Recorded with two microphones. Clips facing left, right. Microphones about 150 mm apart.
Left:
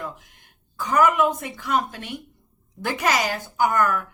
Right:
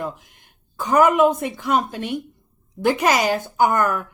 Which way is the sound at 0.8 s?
25° right (ahead or behind).